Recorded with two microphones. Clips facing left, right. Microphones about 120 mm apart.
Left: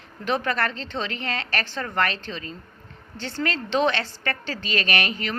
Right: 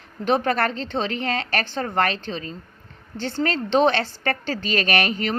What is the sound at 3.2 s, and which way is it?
Speech, 30° right (ahead or behind).